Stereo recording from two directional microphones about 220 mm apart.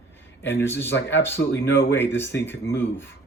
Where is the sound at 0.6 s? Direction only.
10° left (ahead or behind).